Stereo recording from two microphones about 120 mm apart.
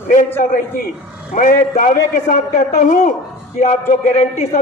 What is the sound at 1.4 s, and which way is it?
A man's voice, 90° left.